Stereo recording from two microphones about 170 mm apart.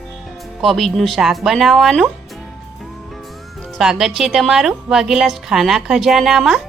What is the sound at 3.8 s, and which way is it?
A woman's voice, centre (ahead or behind).